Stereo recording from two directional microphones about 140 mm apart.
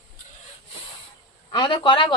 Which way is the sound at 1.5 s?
35° left (ahead or behind).